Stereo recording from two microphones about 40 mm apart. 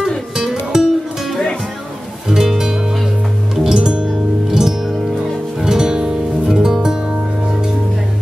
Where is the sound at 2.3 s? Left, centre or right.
Centre.